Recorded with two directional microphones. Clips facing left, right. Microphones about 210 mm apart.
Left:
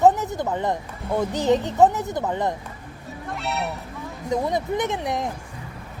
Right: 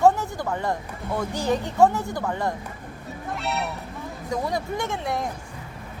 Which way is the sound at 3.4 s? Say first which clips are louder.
Left 1 dB; centre (ahead or behind).